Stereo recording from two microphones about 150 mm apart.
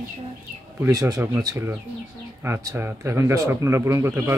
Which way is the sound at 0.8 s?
20° right (ahead or behind).